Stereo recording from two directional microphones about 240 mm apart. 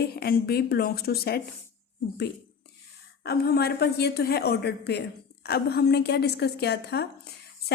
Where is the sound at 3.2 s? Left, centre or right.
Left.